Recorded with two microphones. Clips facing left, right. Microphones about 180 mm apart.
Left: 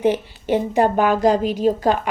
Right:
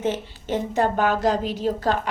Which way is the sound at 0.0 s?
10° left (ahead or behind).